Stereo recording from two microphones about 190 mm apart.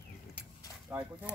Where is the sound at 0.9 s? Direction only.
10° right (ahead or behind).